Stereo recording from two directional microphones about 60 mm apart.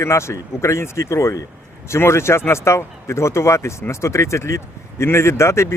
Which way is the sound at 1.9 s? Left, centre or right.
Left.